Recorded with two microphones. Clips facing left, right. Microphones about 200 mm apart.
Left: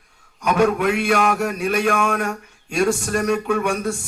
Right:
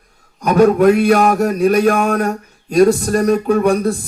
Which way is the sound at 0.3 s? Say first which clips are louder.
Right 7 dB; 40° right (ahead or behind).